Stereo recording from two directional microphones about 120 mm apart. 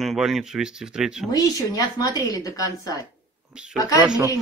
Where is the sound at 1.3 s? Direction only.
30° left (ahead or behind).